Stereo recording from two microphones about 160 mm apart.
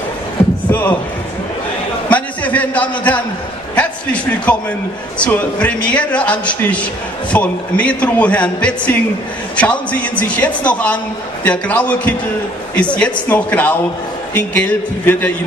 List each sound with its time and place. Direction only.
0.7 s speech: 10° left (ahead or behind)
2.0 s a sound: 10° left (ahead or behind)
5.2 s a man's voice: 5° left (ahead or behind)